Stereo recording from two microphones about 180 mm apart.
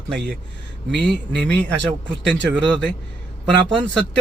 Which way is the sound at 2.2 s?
80° right.